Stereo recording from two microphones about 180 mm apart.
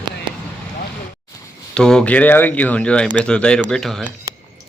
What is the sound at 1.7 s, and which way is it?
Speech, 5° left (ahead or behind).